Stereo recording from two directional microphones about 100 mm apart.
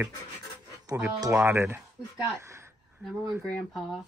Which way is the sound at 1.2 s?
30° right (ahead or behind).